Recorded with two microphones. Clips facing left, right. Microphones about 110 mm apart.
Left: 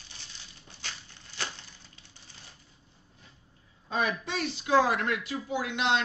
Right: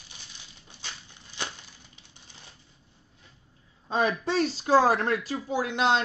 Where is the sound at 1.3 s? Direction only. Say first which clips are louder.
Right 1 dB; 20° right (ahead or behind).